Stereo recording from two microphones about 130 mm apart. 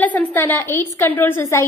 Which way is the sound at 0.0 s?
15° left (ahead or behind).